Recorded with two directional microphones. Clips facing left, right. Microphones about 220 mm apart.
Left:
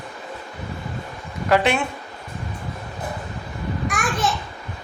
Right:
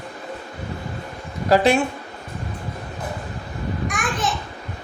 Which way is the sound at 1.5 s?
35° right (ahead or behind).